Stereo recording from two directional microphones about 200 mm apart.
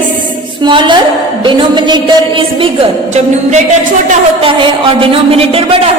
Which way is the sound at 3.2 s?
35° right (ahead or behind).